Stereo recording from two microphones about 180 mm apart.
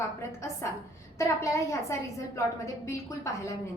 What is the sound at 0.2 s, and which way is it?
A woman's voice, 15° left (ahead or behind).